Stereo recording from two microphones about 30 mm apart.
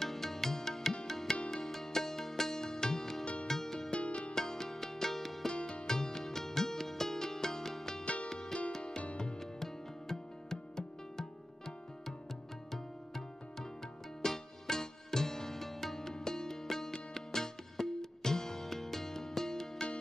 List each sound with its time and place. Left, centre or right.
0.0 s music: centre
1.3 s music: left
1.6 s music: centre
3.9 s music: left
4.4 s music: centre
5.5 s music: left
5.9 s music: centre
8.0 s music: left
8.3 s music: centre
8.7 s music: left
12.7 s music: centre